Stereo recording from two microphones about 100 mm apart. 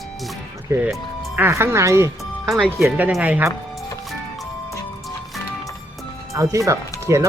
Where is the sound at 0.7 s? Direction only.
25° right (ahead or behind).